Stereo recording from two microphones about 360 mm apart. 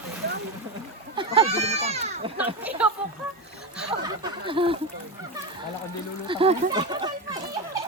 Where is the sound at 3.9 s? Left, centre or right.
Centre.